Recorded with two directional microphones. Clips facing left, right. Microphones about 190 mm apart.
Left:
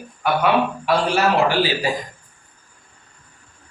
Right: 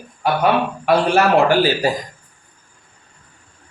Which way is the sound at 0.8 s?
50° right (ahead or behind).